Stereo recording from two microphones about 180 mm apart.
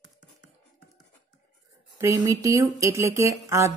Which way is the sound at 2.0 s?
15° right (ahead or behind).